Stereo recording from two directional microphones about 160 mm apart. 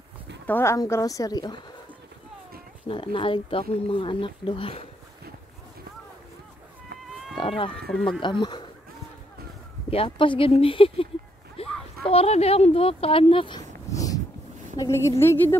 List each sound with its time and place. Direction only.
0.5 s speech: 15° left (ahead or behind)
2.9 s speech: 35° left (ahead or behind)
7.3 s run: 30° left (ahead or behind)
7.8 s speech: 5° left (ahead or behind)
8.2 s speech: 30° left (ahead or behind)
9.8 s speech: 35° left (ahead or behind)
11.6 s a sound: 35° left (ahead or behind)
12.0 s speech: 40° left (ahead or behind)
13.9 s a sound: 20° left (ahead or behind)
14.8 s a woman's voice: 15° left (ahead or behind)